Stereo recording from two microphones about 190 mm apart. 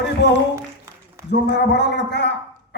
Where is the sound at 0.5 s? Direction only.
15° right (ahead or behind).